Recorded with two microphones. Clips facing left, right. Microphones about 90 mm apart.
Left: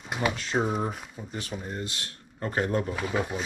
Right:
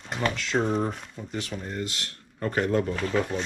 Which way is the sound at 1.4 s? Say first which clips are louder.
Right 1 dB; 25° left (ahead or behind).